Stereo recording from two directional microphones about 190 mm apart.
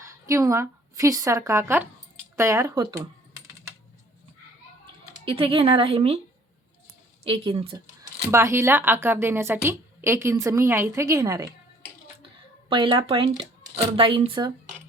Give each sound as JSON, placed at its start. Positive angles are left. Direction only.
{"t": 0.0, "sound": "a woman's voice", "side_deg": -15}
{"t": 5.2, "sound": "speech", "side_deg": -30}
{"t": 7.3, "sound": "speech", "side_deg": -30}
{"t": 8.3, "sound": "a woman's voice", "side_deg": -15}
{"t": 12.6, "sound": "speech", "side_deg": -25}